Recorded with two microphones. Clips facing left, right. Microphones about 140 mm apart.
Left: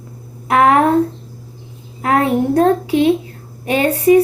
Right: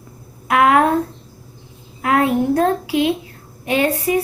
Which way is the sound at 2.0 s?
35° left (ahead or behind).